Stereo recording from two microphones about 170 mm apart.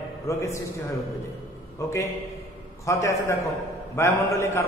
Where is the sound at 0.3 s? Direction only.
15° left (ahead or behind).